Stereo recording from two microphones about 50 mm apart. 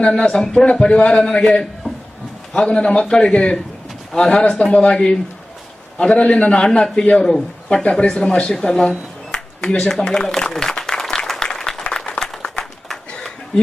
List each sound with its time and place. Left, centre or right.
0.0 s a man's voice: centre
1.8 s a sound: left
2.6 s a man's voice: centre
9.3 s applause: centre